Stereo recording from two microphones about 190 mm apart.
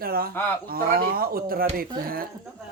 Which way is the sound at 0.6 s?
50° right (ahead or behind).